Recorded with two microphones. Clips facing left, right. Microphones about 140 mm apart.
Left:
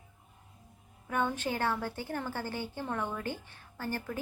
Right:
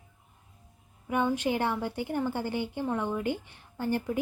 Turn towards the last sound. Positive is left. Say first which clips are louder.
# right 7 dB
turn(degrees=-20)  # may be behind; listen again after turning